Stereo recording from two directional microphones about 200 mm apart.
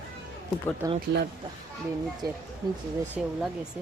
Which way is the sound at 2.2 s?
50° right (ahead or behind).